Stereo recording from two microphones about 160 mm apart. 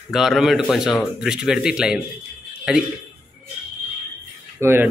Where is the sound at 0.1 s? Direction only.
Centre (ahead or behind).